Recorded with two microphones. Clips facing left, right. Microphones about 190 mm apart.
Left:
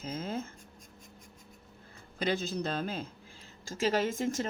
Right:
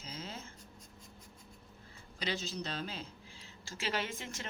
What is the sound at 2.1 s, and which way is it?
Speech, 50° left (ahead or behind).